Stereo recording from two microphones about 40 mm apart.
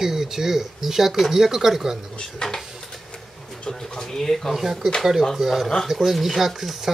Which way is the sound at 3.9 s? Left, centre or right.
Centre.